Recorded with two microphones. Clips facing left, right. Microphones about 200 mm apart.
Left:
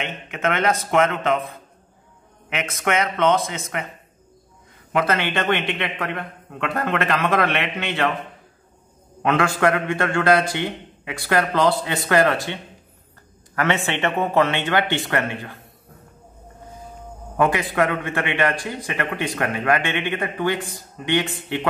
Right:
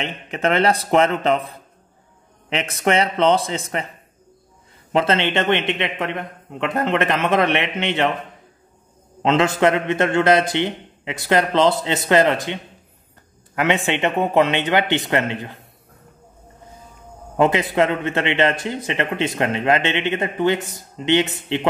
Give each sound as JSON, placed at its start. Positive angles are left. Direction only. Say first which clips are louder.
{"t": 0.0, "sound": "speech", "louder": "right 2 dB", "side_deg": -35}
{"t": 2.5, "sound": "speech", "louder": "right 3 dB", "side_deg": -30}
{"t": 4.9, "sound": "a man's voice", "louder": "right 3 dB", "side_deg": -25}
{"t": 9.2, "sound": "a man's voice", "louder": "right 3 dB", "side_deg": -20}
{"t": 13.8, "sound": "speech", "louder": "right 2 dB", "side_deg": -15}
{"t": 17.4, "sound": "a man's voice", "louder": "right 3 dB", "side_deg": -20}